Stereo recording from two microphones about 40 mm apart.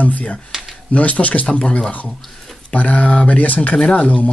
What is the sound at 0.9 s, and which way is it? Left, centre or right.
Speech, left.